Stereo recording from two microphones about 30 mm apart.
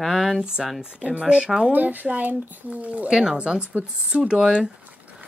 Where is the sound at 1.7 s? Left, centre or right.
Right.